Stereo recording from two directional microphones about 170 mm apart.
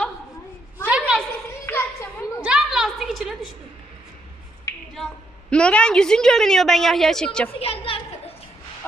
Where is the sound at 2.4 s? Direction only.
5° right (ahead or behind).